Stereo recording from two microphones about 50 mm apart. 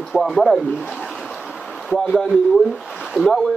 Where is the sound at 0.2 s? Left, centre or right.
Centre.